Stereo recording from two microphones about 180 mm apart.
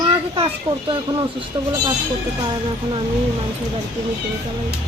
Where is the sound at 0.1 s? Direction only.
25° right (ahead or behind).